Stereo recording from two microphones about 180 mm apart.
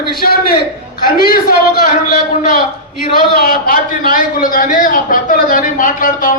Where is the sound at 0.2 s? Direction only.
60° left (ahead or behind).